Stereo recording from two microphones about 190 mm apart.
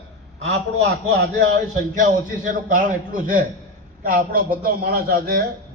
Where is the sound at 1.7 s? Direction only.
45° right (ahead or behind).